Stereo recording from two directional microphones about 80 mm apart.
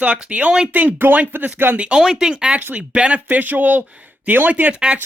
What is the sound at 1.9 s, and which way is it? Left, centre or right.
Speech, centre.